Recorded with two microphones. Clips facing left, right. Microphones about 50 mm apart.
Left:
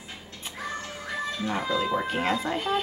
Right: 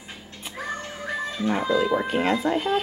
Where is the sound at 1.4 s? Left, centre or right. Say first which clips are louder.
Right 6 dB; centre.